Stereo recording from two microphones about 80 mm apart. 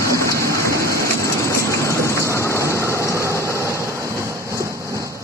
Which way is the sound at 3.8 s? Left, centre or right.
Right.